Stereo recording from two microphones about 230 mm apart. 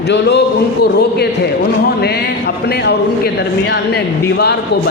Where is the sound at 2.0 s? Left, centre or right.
Left.